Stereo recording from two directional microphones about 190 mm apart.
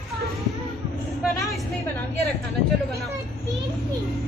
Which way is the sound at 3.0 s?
15° right (ahead or behind).